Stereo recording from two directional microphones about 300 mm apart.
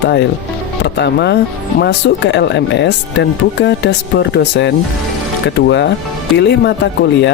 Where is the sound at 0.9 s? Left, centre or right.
Left.